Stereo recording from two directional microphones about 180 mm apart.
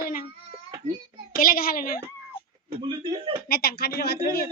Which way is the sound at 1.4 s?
55° left (ahead or behind).